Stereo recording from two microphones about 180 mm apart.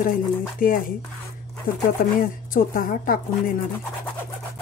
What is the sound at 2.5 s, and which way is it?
A woman's voice, 50° left (ahead or behind).